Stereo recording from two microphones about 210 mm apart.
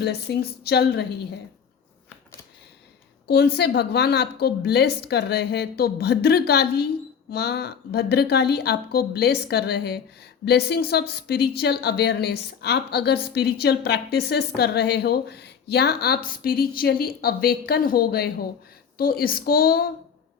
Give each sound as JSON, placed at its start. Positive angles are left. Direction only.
{"t": 0.0, "sound": "a woman's voice", "side_deg": 50}
{"t": 3.2, "sound": "a woman's voice", "side_deg": 50}